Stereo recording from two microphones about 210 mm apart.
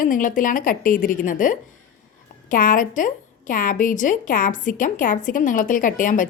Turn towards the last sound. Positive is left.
turn(degrees=40)  # may be behind; listen again after turning